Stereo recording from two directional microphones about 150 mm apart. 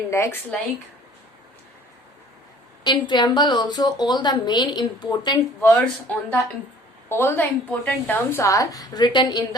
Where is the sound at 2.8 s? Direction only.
30° left (ahead or behind).